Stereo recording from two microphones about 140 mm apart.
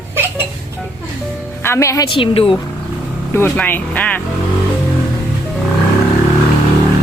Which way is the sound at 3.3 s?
15° left (ahead or behind).